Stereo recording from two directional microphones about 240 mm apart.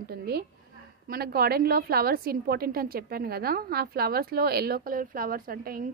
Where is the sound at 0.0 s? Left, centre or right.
Right.